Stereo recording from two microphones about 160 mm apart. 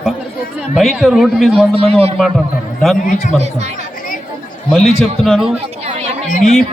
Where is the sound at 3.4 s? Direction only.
45° right (ahead or behind).